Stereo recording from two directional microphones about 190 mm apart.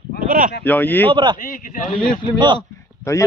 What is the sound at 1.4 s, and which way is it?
Speech, 45° left (ahead or behind).